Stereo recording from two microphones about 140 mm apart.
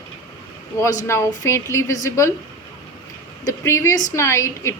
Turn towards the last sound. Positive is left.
turn(degrees=20)  # may be behind; listen again after turning